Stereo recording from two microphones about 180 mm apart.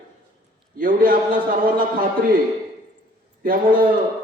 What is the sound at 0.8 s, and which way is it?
Speech, 50° right (ahead or behind).